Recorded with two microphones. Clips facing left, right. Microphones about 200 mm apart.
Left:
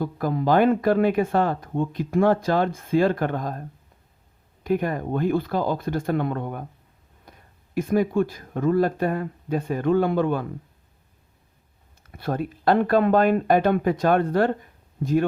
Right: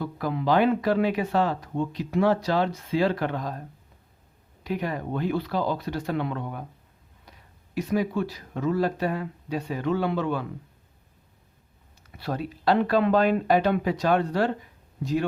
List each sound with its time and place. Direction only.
0.0 s speech: 45° left (ahead or behind)
4.6 s speech: 50° left (ahead or behind)
12.1 s speech: 50° left (ahead or behind)